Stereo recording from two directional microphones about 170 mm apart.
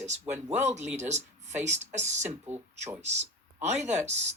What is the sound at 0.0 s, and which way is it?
Speech, 45° right (ahead or behind).